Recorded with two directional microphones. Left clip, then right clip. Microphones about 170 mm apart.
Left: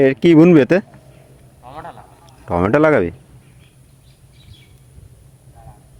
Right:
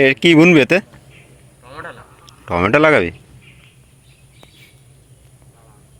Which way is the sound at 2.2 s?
25° left (ahead or behind).